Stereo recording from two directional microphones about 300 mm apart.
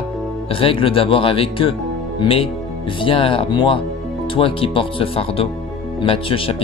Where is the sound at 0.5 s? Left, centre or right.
Centre.